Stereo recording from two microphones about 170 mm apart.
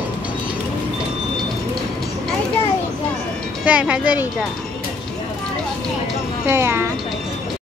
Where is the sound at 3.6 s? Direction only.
5° right (ahead or behind).